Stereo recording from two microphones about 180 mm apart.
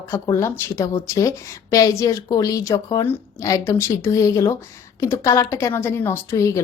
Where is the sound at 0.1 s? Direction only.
15° left (ahead or behind).